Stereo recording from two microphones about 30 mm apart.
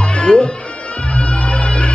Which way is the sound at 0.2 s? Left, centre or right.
Left.